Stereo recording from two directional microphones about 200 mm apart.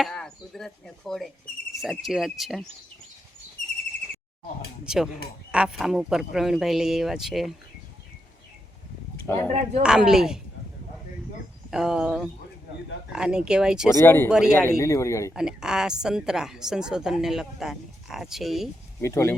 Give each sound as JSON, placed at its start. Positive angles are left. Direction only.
{"t": 0.0, "sound": "chopping", "side_deg": 5}
{"t": 1.8, "sound": "a woman's voice", "side_deg": 0}
{"t": 4.9, "sound": "a woman's voice", "side_deg": -5}
{"t": 9.2, "sound": "speech", "side_deg": 10}
{"t": 9.5, "sound": "a woman's voice", "side_deg": -35}
{"t": 9.8, "sound": "a woman's voice", "side_deg": -5}
{"t": 11.7, "sound": "a woman's voice", "side_deg": 0}
{"t": 13.9, "sound": "a man's voice", "side_deg": 10}
{"t": 14.3, "sound": "a woman's voice", "side_deg": -5}
{"t": 14.6, "sound": "a man's voice", "side_deg": 15}
{"t": 15.3, "sound": "a woman's voice", "side_deg": -5}
{"t": 19.0, "sound": "a man's voice", "side_deg": 15}